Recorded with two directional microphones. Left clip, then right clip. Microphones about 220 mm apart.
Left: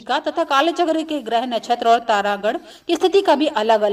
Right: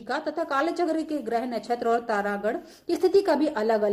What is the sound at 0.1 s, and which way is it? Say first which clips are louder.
A woman's voice: left 9 dB; 35° left (ahead or behind).